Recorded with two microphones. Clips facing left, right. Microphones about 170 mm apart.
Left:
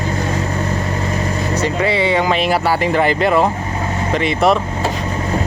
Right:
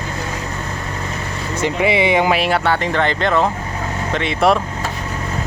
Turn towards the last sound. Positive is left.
turn(degrees=0)  # may be behind; listen again after turning